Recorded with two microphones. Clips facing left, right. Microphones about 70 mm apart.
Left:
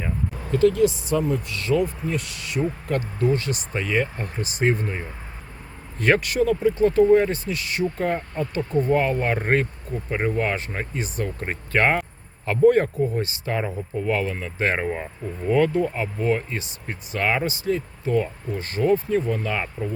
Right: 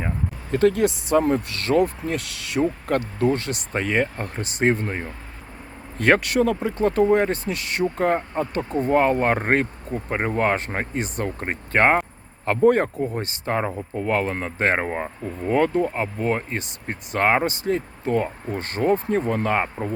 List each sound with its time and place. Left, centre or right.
0.5 s speech: right
2.8 s speech: right
6.0 s speech: right